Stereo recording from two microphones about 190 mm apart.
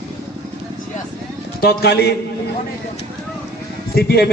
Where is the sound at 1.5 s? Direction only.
60° left (ahead or behind).